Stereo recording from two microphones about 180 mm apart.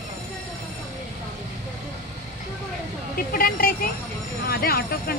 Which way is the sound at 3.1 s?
55° left (ahead or behind).